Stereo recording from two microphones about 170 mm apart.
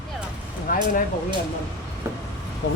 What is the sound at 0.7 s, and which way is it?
Speech, 55° left (ahead or behind).